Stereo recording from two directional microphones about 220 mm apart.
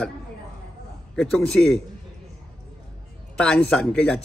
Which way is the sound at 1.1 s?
Centre (ahead or behind).